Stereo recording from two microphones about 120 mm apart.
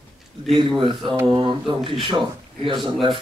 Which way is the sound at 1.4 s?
45° right (ahead or behind).